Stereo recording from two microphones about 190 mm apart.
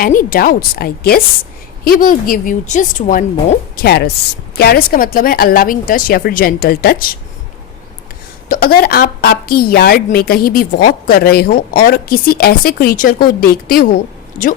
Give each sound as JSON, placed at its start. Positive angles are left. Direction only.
{"t": 0.0, "sound": "a woman's voice", "side_deg": 45}
{"t": 3.8, "sound": "a woman's voice", "side_deg": 55}
{"t": 8.4, "sound": "a woman's voice", "side_deg": 50}